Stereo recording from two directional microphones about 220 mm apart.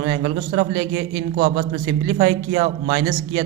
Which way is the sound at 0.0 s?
25° right (ahead or behind).